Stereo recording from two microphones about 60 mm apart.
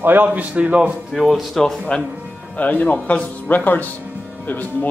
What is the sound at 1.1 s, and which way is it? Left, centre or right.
Speech, centre.